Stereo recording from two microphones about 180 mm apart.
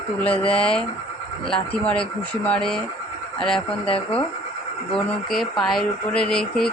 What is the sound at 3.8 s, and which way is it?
Speech, 30° left (ahead or behind).